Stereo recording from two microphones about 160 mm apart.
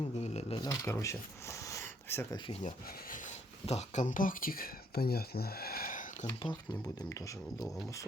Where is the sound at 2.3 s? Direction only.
30° left (ahead or behind).